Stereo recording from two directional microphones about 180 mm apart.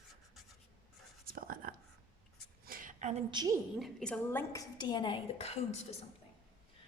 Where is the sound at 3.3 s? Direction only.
20° right (ahead or behind).